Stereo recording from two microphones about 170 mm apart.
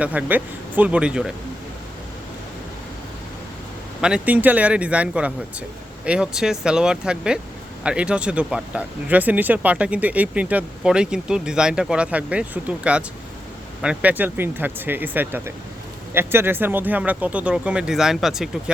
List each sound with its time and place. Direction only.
0.0 s speech: 10° right (ahead or behind)
4.0 s speech: 5° right (ahead or behind)